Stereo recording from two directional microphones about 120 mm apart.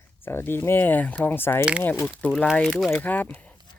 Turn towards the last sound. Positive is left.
turn(degrees=10)  # may be behind; listen again after turning